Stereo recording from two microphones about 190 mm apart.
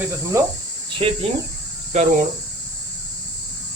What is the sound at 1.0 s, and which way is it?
Speech, 25° right (ahead or behind).